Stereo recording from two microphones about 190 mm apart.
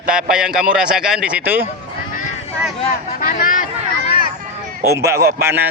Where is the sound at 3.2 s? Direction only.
45° left (ahead or behind).